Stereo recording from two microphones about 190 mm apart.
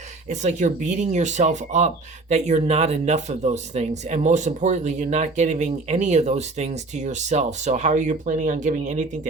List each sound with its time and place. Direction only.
0.3 s speech: 40° right (ahead or behind)